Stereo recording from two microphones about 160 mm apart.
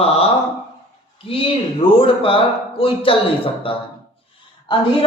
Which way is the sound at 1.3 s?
35° left (ahead or behind).